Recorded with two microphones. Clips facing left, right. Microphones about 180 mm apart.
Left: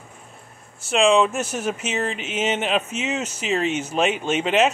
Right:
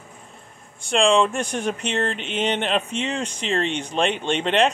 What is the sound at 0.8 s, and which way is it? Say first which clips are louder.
Speech: left 1 dB; 5° left (ahead or behind).